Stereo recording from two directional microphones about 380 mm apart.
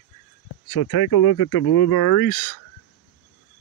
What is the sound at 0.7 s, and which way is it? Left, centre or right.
Speech, left.